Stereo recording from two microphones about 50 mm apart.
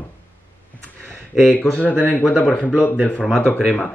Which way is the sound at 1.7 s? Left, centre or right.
Left.